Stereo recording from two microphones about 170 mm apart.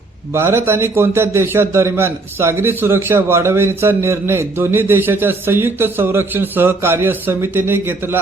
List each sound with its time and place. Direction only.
0.3 s a man's voice: 15° right (ahead or behind)